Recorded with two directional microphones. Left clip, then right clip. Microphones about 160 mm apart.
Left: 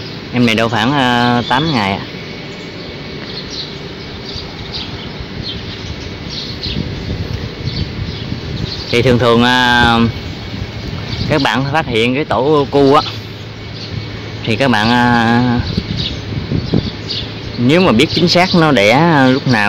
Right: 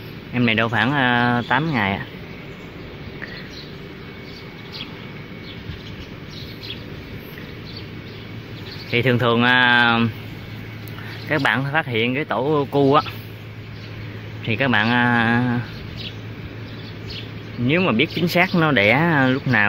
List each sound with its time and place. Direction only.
0.3 s speech: 10° left (ahead or behind)
8.9 s speech: 15° left (ahead or behind)
11.2 s speech: 10° left (ahead or behind)
14.4 s speech: 15° left (ahead or behind)
17.6 s speech: 20° left (ahead or behind)